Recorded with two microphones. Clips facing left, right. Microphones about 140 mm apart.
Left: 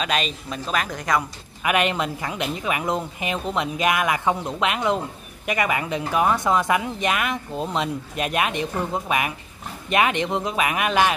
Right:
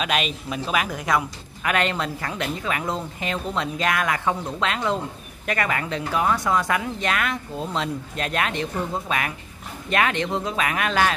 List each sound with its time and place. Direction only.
0.0 s speech: 5° right (ahead or behind)
1.6 s speech: 15° left (ahead or behind)